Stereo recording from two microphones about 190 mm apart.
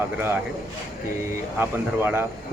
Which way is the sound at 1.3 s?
10° right (ahead or behind).